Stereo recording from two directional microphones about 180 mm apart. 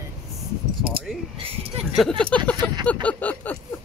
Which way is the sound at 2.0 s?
5° left (ahead or behind).